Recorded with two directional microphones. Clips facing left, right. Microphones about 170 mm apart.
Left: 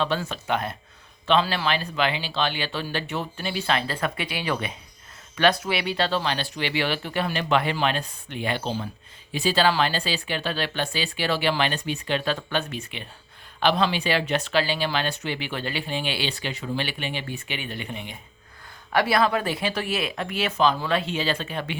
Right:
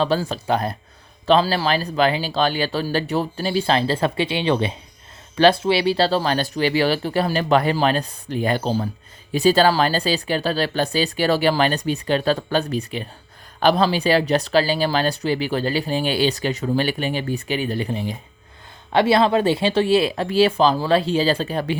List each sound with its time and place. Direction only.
0.0 s speech: 35° right (ahead or behind)